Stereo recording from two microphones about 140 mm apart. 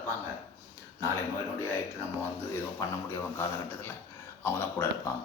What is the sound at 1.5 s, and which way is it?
Speech, 15° left (ahead or behind).